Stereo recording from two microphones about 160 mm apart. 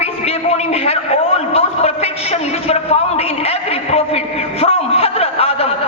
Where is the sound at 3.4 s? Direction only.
40° left (ahead or behind).